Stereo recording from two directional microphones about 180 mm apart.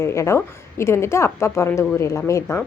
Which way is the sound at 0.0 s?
15° left (ahead or behind).